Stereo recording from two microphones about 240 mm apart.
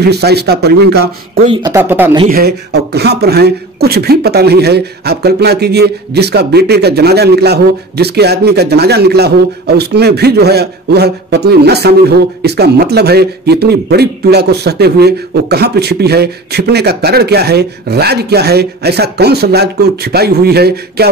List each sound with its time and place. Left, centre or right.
0.0 s speech: right
1.4 s speech: centre
2.3 s speech: right